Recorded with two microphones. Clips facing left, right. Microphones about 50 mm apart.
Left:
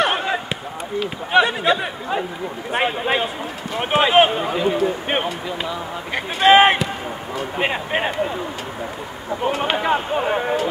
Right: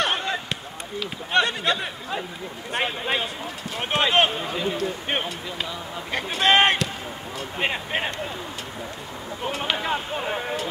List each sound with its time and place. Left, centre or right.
0.0 s basketball bounce: centre
1.3 s speech: centre
9.4 s speech: centre